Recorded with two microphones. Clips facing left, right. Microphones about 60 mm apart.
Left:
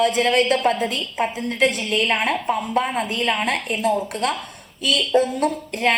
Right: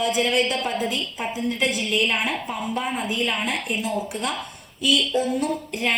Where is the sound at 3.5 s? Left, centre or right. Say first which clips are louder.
Left 5 dB; left.